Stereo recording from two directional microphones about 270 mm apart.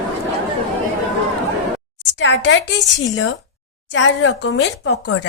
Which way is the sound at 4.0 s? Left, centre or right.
Left.